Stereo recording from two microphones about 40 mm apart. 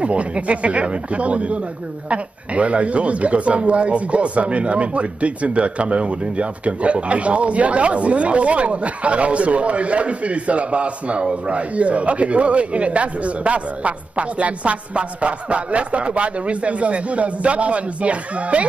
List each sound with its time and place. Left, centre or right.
0.0 s speech: right